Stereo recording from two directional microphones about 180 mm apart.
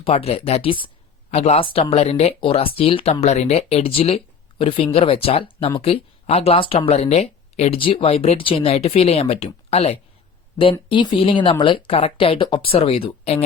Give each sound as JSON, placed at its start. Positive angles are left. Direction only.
{"t": 0.0, "sound": "speech", "side_deg": 35}